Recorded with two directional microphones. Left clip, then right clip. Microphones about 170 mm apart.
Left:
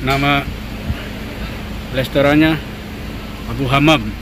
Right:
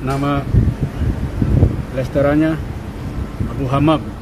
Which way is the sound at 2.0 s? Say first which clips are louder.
Left 3 dB; 5° left (ahead or behind).